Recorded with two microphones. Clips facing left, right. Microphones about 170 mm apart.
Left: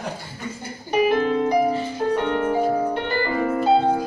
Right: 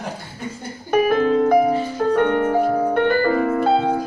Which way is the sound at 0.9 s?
55° right (ahead or behind).